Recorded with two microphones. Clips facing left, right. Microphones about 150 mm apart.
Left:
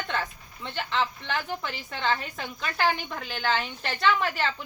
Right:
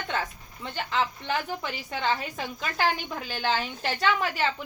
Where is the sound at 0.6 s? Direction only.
5° right (ahead or behind).